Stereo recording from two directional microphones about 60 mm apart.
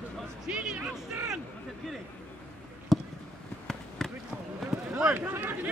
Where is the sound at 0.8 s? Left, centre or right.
Right.